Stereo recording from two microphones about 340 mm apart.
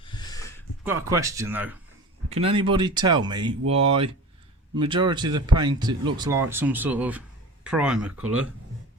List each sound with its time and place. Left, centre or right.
0.0 s a sound: centre
0.9 s speech: centre
2.3 s speech: centre